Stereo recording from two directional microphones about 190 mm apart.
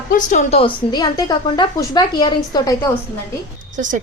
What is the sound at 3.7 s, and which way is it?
Speech, 40° right (ahead or behind).